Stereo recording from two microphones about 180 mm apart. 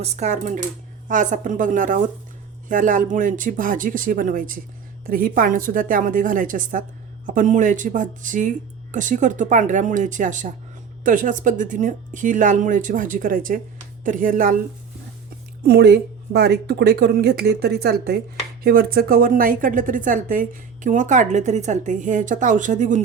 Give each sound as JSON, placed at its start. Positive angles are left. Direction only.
{"t": 0.0, "sound": "a woman's voice", "side_deg": -40}
{"t": 15.6, "sound": "a woman's voice", "side_deg": -65}